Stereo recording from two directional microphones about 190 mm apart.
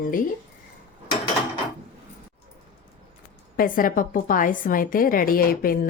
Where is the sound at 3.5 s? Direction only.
45° left (ahead or behind).